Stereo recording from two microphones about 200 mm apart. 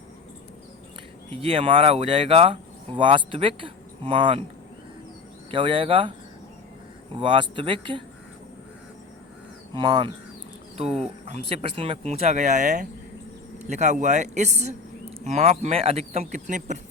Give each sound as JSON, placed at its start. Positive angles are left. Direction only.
{"t": 1.3, "sound": "speech", "side_deg": -25}
{"t": 5.5, "sound": "speech", "side_deg": -25}
{"t": 7.1, "sound": "speech", "side_deg": -25}
{"t": 9.7, "sound": "speech", "side_deg": -20}
{"t": 11.3, "sound": "speech", "side_deg": -30}